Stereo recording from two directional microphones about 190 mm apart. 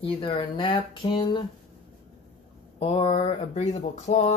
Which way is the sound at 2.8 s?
30° left (ahead or behind).